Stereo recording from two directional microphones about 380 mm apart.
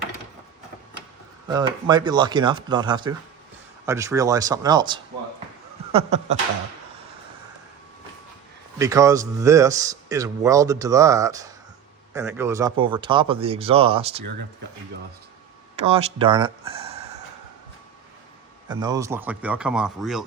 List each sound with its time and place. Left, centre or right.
1.5 s a man's voice: centre
8.8 s a man's voice: centre
15.7 s speech: centre
18.7 s speech: centre